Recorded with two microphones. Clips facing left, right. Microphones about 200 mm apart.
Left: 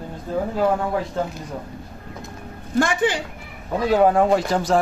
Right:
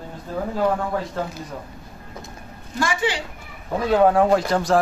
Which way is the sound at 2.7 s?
55° left (ahead or behind).